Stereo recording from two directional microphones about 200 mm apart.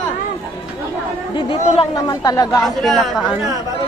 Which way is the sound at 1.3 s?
25° left (ahead or behind).